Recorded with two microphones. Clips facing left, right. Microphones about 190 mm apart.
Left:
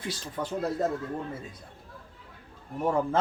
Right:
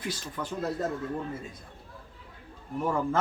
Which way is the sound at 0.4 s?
30° left (ahead or behind).